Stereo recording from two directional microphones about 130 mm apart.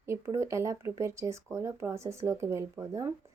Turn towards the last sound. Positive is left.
turn(degrees=-25)  # may be behind; listen again after turning